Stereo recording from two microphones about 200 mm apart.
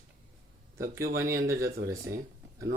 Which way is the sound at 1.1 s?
15° right (ahead or behind).